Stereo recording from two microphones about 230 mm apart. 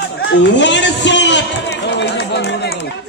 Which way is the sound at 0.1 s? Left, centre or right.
Left.